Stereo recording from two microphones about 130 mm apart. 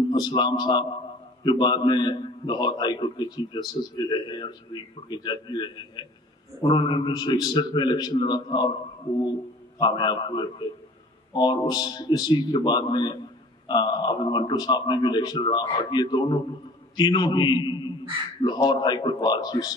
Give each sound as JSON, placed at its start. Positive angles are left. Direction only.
{"t": 0.1, "sound": "a man's voice", "side_deg": 35}
{"t": 9.8, "sound": "a man's voice", "side_deg": 35}
{"t": 11.7, "sound": "a man's voice", "side_deg": 30}